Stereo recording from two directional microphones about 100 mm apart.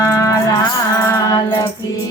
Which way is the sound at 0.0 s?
30° left (ahead or behind).